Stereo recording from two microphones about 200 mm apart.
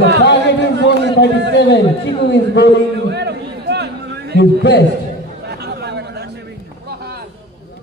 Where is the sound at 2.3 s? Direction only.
60° left (ahead or behind).